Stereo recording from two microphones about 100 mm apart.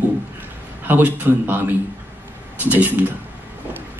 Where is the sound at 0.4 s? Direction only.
20° right (ahead or behind).